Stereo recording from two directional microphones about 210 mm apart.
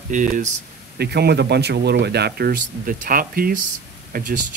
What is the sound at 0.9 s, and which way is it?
Speech, 50° right (ahead or behind).